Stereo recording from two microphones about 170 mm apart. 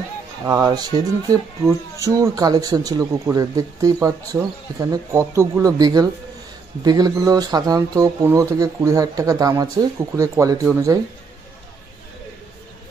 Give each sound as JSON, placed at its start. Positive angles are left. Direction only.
{"t": 0.5, "sound": "speech", "side_deg": -25}